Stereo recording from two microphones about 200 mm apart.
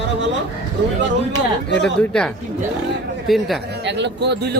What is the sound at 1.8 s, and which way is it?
Speech, 5° left (ahead or behind).